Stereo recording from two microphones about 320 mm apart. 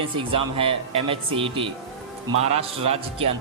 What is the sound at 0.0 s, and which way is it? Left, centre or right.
Speech, centre.